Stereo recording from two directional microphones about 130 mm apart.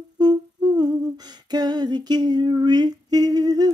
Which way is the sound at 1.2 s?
30° right (ahead or behind).